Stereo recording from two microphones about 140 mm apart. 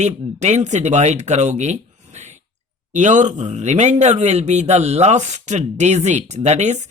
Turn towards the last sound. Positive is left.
turn(degrees=-55)  # may be behind; listen again after turning